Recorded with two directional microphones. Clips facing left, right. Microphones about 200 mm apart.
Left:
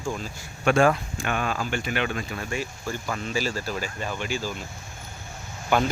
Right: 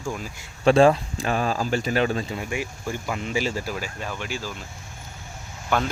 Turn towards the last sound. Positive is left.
turn(degrees=0)  # may be behind; listen again after turning